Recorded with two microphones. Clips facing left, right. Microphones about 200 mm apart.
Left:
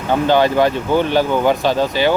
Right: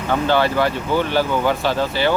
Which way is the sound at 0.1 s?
15° left (ahead or behind).